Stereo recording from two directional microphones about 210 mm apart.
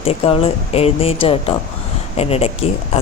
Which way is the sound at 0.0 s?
25° left (ahead or behind).